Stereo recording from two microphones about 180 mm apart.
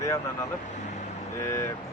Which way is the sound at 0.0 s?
15° left (ahead or behind).